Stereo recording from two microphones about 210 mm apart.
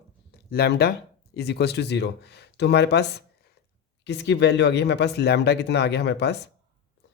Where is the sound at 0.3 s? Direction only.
50° left (ahead or behind).